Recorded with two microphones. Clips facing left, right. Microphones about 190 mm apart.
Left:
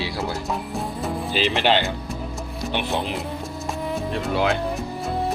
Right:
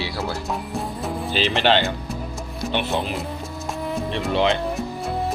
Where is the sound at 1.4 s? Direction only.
10° left (ahead or behind).